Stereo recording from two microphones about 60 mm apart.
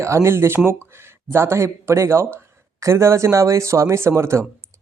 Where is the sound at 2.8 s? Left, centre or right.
Right.